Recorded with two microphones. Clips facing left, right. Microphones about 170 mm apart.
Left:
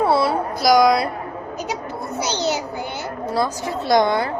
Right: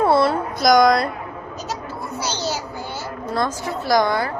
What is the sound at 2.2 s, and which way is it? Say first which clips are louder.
Speech: left 3 dB; 20° left (ahead or behind).